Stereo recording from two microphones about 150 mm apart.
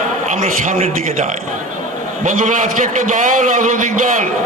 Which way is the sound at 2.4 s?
60° right (ahead or behind).